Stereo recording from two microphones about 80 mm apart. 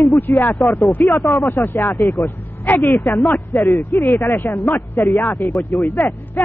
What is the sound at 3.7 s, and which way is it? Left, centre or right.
Speech, left.